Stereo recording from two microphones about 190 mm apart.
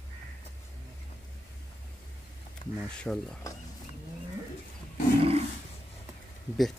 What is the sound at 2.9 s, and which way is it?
Speech, 5° left (ahead or behind).